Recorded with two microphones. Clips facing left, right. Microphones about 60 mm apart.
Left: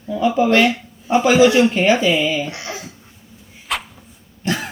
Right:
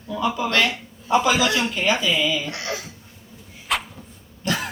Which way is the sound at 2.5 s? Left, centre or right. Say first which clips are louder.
Even; left.